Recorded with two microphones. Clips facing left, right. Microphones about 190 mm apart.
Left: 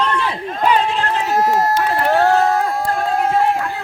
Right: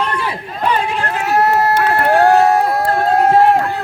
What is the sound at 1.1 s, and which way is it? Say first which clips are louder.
Run: right 3 dB; 65° right (ahead or behind).